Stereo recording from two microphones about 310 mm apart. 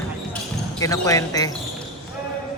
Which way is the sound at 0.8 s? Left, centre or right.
Centre.